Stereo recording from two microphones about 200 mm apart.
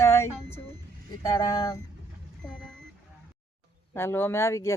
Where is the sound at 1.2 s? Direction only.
20° left (ahead or behind).